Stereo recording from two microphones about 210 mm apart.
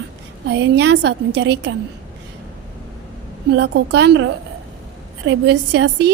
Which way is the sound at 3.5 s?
55° right (ahead or behind).